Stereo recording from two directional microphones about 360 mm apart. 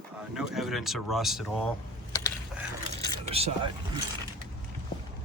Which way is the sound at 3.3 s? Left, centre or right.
Centre.